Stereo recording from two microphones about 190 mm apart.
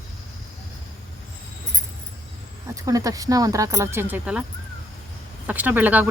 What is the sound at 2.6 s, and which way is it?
Speech, 15° right (ahead or behind).